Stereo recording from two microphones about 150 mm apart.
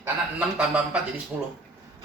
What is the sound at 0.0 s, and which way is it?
Speech, 10° right (ahead or behind).